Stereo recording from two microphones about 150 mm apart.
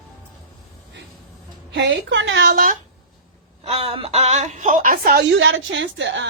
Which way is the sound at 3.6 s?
40° right (ahead or behind).